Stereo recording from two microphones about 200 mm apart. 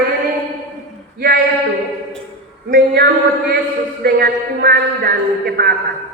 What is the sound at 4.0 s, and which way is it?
A man's voice, 50° right (ahead or behind).